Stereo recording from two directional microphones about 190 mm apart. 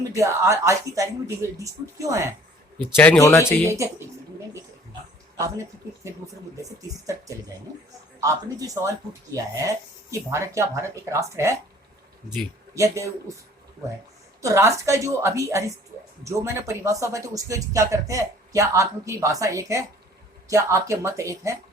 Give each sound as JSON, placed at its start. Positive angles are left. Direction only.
{"t": 0.1, "sound": "speech", "side_deg": -15}
{"t": 2.9, "sound": "speech", "side_deg": 10}
{"t": 3.4, "sound": "speech", "side_deg": -15}
{"t": 7.1, "sound": "speech", "side_deg": -15}
{"t": 12.7, "sound": "speech", "side_deg": -15}
{"t": 14.4, "sound": "speech", "side_deg": -15}